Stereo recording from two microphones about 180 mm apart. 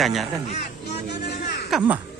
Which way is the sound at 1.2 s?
65° left (ahead or behind).